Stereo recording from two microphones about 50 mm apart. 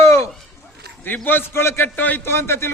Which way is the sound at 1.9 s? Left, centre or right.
Left.